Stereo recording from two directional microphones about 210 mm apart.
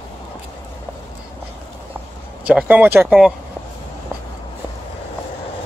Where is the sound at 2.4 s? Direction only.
5° right (ahead or behind).